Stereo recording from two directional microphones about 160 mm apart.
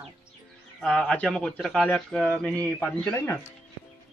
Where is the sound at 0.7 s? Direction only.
5° left (ahead or behind).